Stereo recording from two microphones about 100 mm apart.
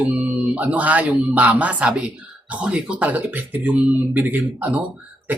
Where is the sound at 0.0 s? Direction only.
15° right (ahead or behind).